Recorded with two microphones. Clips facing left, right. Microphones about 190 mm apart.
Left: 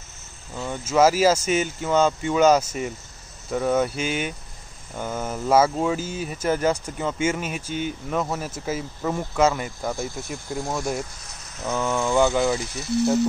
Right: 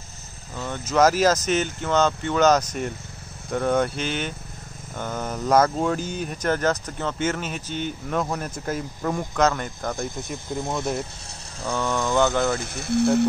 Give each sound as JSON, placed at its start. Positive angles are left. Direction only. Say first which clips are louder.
{"t": 0.6, "sound": "speech", "louder": "left 1 dB", "side_deg": 10}
{"t": 11.6, "sound": "speech", "louder": "left 1 dB", "side_deg": 5}
{"t": 12.5, "sound": "speech", "louder": "right 1 dB", "side_deg": -55}